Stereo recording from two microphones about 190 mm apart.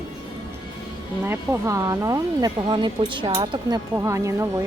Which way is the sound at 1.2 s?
15° right (ahead or behind).